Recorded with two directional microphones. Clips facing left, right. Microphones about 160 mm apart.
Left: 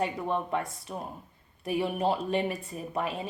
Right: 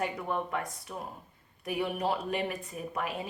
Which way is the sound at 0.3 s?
25° left (ahead or behind).